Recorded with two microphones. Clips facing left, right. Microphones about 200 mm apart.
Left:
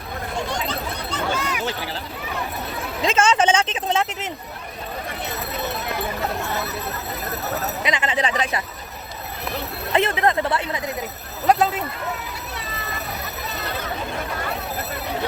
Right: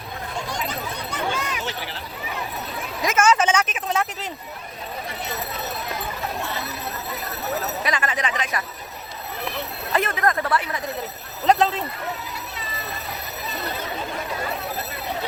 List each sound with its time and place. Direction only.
0.7 s a sound: 15° right (ahead or behind)
3.0 s a woman's voice: 30° left (ahead or behind)
7.9 s a woman's voice: 20° left (ahead or behind)
9.9 s a woman's voice: 25° left (ahead or behind)
11.4 s speech: 5° left (ahead or behind)